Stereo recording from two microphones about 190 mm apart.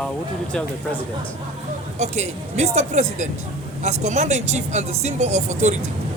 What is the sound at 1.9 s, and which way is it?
Speech, 35° right (ahead or behind).